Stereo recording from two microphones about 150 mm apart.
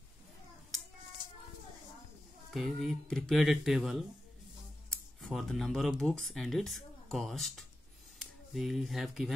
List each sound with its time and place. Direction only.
2.5 s speech: centre (ahead or behind)